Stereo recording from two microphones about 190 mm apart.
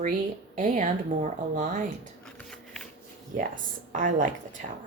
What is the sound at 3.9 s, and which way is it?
Speech, 45° right (ahead or behind).